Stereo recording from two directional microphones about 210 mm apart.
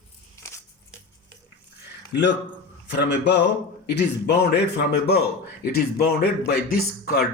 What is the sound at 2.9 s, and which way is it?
A man's voice, 55° left (ahead or behind).